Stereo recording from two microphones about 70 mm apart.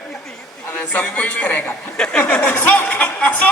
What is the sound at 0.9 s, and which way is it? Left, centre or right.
Speech, left.